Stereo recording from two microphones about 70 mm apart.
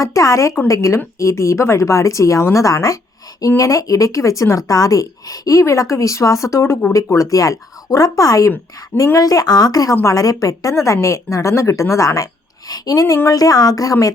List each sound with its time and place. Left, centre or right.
0.0 s speech: left
9.9 s a woman's voice: left
10.2 s speech: left